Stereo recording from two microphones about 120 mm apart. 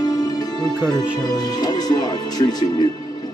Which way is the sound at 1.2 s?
35° left (ahead or behind).